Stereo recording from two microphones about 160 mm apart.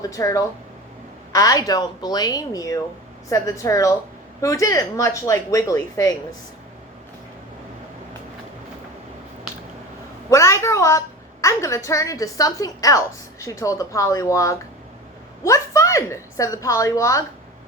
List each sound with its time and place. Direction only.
0.0 s speech: 20° left (ahead or behind)
10.2 s a woman's voice: 20° left (ahead or behind)